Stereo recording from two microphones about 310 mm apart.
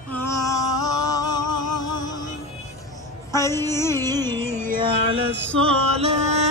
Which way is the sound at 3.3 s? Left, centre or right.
Centre.